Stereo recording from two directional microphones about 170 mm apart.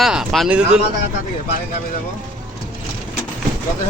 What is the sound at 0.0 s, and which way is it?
Speech, centre (ahead or behind).